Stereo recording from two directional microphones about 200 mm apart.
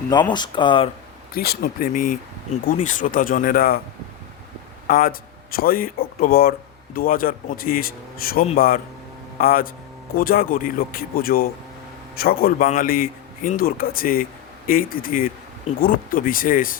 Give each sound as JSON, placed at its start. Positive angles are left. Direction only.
{"t": 0.1, "sound": "speech", "side_deg": 20}
{"t": 1.3, "sound": "speech", "side_deg": 50}
{"t": 4.9, "sound": "speech", "side_deg": 45}